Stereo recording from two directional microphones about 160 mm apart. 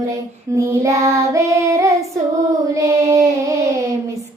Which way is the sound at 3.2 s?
20° right (ahead or behind).